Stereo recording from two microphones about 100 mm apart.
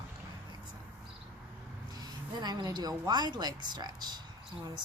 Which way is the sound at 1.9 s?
40° right (ahead or behind).